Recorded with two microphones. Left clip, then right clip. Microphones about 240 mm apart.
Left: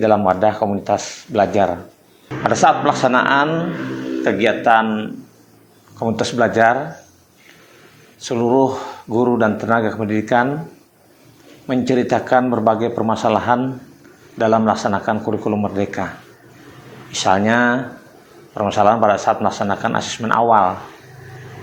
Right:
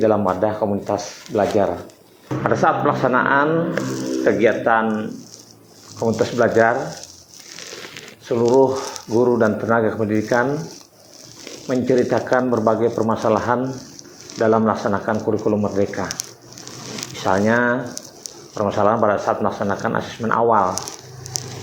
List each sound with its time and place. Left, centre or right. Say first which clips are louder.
0.0 s speech: left 3 dB; left
8.2 s speech: right 1 dB; left
11.7 s speech: left 1 dB; left
17.2 s speech: left 3 dB; left